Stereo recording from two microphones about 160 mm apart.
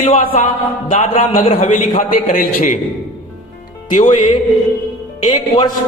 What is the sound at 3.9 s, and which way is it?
Speech, 45° left (ahead or behind).